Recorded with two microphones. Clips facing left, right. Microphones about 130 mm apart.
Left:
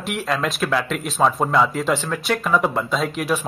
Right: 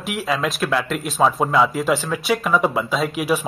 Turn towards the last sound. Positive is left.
turn(degrees=-5)  # may be behind; listen again after turning